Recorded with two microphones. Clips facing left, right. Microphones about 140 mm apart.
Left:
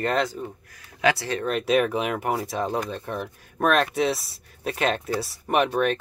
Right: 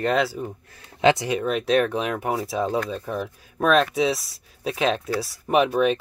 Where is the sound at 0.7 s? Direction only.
25° right (ahead or behind).